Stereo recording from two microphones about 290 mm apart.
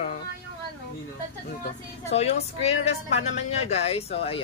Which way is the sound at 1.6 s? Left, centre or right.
Left.